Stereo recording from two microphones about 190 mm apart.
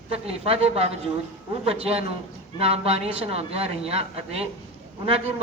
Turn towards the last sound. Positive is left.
turn(degrees=-30)  # may be behind; listen again after turning